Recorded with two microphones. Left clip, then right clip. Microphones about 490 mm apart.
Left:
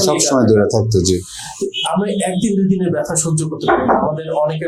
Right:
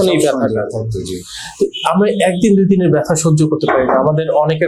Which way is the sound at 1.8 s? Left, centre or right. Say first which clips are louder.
Right 5 dB; right.